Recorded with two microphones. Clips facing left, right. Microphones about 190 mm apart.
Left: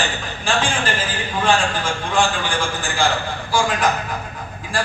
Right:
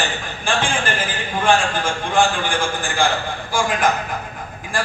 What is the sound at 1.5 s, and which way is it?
A man's voice, 50° right (ahead or behind).